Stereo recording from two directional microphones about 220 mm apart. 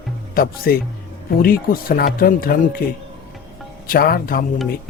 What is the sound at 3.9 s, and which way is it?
Speech, 40° left (ahead or behind).